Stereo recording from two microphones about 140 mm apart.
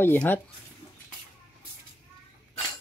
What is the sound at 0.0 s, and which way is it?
Speech, 15° left (ahead or behind).